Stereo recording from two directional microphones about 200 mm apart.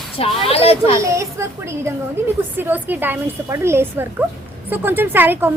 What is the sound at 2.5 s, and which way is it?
A woman's voice, 10° right (ahead or behind).